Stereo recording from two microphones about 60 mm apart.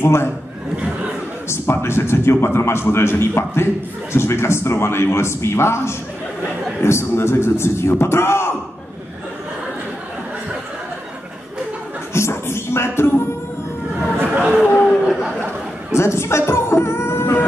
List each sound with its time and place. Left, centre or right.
0.0 s a man's voice: left
1.5 s a man's voice: left
12.1 s music: left
14.1 s chatter: right
15.9 s music: left